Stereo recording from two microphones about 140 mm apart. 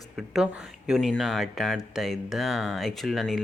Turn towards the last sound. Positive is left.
turn(degrees=0)  # may be behind; listen again after turning